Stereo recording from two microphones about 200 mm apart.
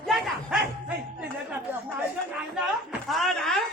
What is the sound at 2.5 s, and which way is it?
Music, centre (ahead or behind).